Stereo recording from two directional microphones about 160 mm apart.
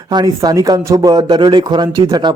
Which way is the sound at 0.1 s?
25° right (ahead or behind).